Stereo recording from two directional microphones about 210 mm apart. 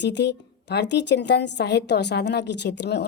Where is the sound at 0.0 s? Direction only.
55° left (ahead or behind).